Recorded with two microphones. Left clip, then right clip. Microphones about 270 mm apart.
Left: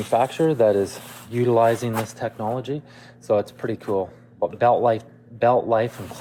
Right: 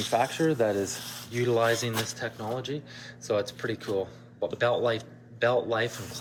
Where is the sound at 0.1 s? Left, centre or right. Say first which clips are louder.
Left 7 dB; left.